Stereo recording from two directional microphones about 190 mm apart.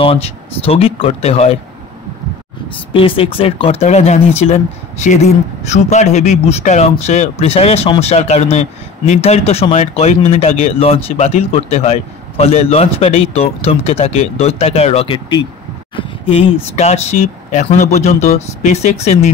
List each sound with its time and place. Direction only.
0.0 s speech: 30° left (ahead or behind)
2.9 s speech: 30° left (ahead or behind)